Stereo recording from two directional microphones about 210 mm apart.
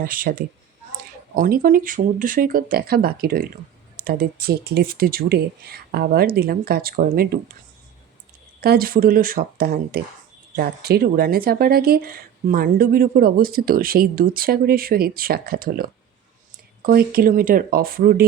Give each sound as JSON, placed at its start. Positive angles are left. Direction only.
{"t": 0.0, "sound": "speech", "side_deg": -45}
{"t": 8.6, "sound": "speech", "side_deg": -45}